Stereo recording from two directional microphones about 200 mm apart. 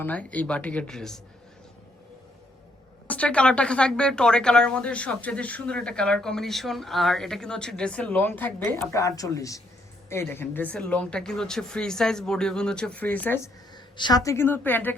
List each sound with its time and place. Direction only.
0.0 s speech: 5° left (ahead or behind)
3.1 s a woman's voice: 5° left (ahead or behind)
13.9 s a woman's voice: 20° left (ahead or behind)